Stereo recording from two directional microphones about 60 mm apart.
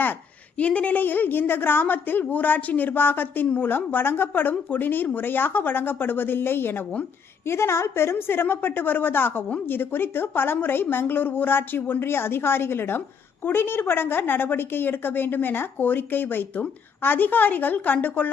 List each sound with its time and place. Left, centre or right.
0.6 s a woman's voice: left